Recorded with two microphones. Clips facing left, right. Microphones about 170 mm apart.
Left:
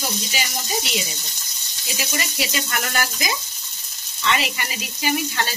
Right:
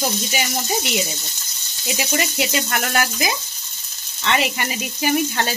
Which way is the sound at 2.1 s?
50° right (ahead or behind).